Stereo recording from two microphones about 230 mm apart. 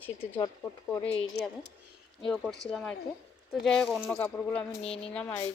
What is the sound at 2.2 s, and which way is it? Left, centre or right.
A woman's voice, centre.